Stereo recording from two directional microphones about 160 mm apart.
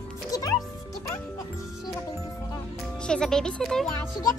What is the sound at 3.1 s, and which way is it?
Speech, 5° left (ahead or behind).